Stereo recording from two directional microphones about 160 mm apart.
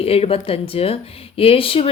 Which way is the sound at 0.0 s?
35° left (ahead or behind).